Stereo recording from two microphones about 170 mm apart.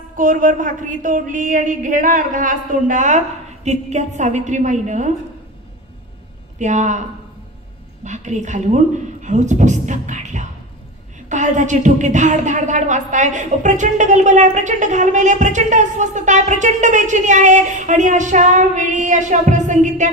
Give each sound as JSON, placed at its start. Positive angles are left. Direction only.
{"t": 0.1, "sound": "speech", "side_deg": -50}
{"t": 6.6, "sound": "speech", "side_deg": -45}
{"t": 8.0, "sound": "a woman's voice", "side_deg": -45}